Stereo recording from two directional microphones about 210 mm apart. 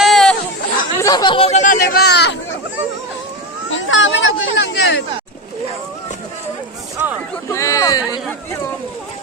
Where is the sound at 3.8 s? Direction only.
65° left (ahead or behind).